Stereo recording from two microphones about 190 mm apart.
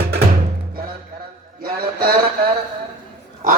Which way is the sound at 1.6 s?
50° right (ahead or behind).